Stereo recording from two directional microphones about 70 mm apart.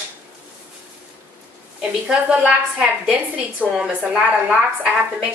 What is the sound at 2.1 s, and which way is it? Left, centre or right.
A woman's voice, centre.